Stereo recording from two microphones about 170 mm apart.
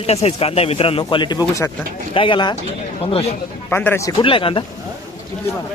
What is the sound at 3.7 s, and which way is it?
Speech, 10° left (ahead or behind).